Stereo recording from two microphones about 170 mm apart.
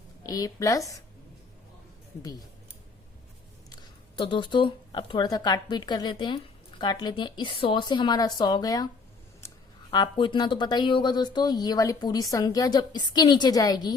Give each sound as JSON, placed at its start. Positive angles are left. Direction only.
{"t": 0.2, "sound": "speech", "side_deg": 20}
{"t": 3.7, "sound": "speech", "side_deg": 30}
{"t": 9.4, "sound": "a sound", "side_deg": 15}
{"t": 9.9, "sound": "speech", "side_deg": 25}